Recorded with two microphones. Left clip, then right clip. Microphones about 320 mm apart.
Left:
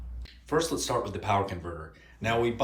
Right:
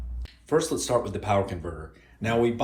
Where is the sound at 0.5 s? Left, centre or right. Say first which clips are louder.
Right 4 dB; centre.